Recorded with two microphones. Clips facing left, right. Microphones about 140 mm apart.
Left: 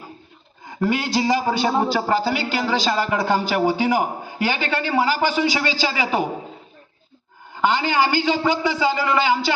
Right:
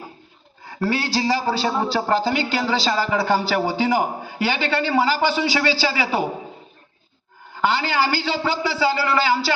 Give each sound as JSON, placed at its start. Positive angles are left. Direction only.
{"t": 0.6, "sound": "a man's voice", "side_deg": 15}
{"t": 3.2, "sound": "speech", "side_deg": -5}
{"t": 3.4, "sound": "a man's voice", "side_deg": 10}
{"t": 7.5, "sound": "a man's voice", "side_deg": 15}